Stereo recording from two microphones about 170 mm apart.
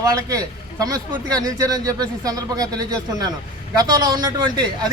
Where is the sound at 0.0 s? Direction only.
20° right (ahead or behind).